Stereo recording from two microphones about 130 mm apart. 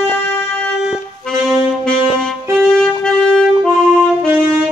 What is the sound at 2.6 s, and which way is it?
Music, 5° left (ahead or behind).